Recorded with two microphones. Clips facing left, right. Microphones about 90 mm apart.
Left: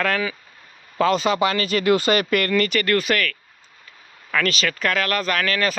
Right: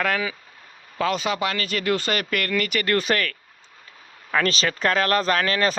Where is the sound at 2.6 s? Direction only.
20° right (ahead or behind).